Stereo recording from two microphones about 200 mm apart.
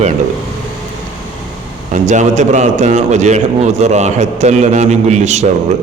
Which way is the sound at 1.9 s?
35° right (ahead or behind).